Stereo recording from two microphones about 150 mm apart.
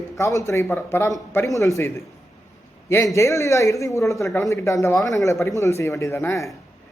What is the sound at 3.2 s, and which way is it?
A man's voice, 20° left (ahead or behind).